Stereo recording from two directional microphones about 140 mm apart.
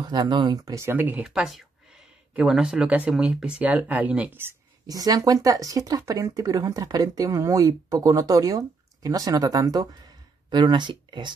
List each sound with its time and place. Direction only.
0.0 s speech: 30° right (ahead or behind)